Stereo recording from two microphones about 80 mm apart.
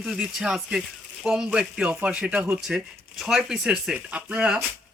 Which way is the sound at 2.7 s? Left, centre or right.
Centre.